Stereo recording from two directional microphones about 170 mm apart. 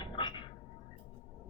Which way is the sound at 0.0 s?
25° left (ahead or behind).